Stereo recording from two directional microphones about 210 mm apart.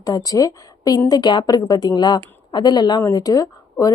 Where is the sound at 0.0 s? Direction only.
15° left (ahead or behind).